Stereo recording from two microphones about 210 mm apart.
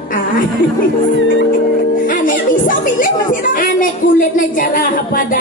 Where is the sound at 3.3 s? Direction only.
40° left (ahead or behind).